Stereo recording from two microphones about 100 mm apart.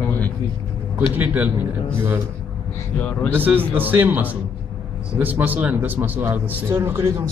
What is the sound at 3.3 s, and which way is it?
A man's voice, 20° right (ahead or behind).